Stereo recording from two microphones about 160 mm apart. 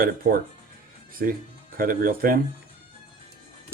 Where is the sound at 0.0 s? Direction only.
60° right (ahead or behind).